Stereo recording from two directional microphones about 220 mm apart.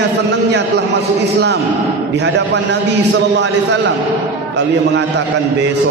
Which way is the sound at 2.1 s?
50° right (ahead or behind).